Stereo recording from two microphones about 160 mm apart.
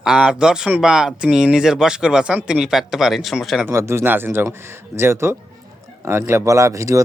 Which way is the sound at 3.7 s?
15° right (ahead or behind).